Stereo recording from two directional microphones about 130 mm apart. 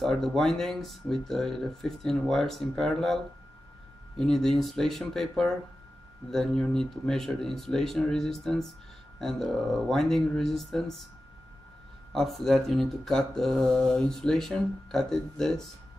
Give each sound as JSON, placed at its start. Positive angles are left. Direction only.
{"t": 0.0, "sound": "speech", "side_deg": 5}
{"t": 4.2, "sound": "speech", "side_deg": 5}
{"t": 12.1, "sound": "speech", "side_deg": 0}